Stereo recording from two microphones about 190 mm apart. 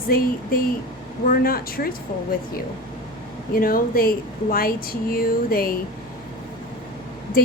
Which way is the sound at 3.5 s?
50° left (ahead or behind).